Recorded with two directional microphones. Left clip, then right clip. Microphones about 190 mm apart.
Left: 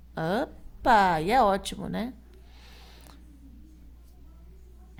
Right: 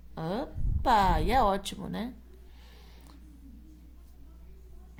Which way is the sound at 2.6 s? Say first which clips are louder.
Left 6 dB; 30° left (ahead or behind).